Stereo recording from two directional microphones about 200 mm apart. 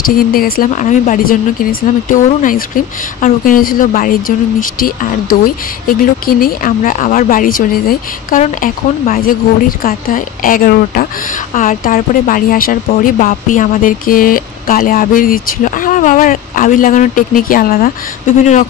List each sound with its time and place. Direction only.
0.0 s speech: 45° left (ahead or behind)